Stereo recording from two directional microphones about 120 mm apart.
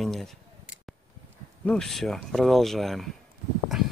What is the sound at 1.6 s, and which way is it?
Speech, 5° left (ahead or behind).